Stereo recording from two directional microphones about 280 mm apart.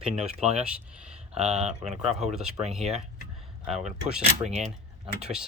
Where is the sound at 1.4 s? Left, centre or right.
Right.